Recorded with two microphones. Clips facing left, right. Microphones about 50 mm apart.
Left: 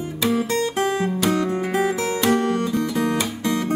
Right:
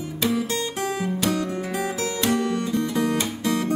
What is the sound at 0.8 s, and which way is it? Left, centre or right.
Music, left.